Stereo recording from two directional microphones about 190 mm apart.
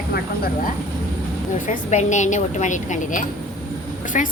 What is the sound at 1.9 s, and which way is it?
A woman's voice, 40° left (ahead or behind).